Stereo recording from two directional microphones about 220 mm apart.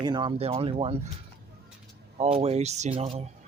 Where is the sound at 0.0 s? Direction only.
20° right (ahead or behind).